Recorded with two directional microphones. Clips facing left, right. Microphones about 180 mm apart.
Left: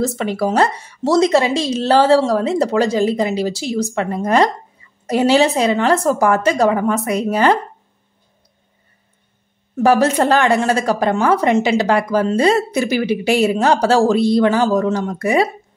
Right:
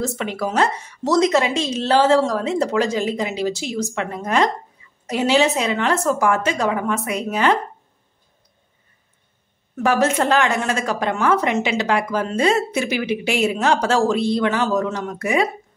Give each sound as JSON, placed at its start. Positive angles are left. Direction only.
{"t": 0.0, "sound": "a woman's voice", "side_deg": 35}
{"t": 9.8, "sound": "a woman's voice", "side_deg": 35}